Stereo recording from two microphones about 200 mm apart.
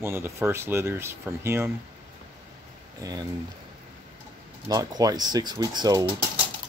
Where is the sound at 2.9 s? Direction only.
15° right (ahead or behind).